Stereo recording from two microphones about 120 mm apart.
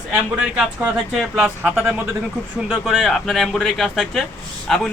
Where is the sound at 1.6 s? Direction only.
15° right (ahead or behind).